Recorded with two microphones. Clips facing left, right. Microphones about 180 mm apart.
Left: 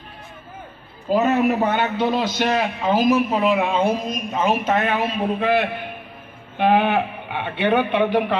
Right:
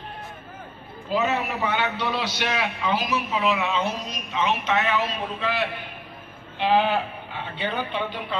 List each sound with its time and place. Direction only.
1.1 s a man's voice: 50° left (ahead or behind)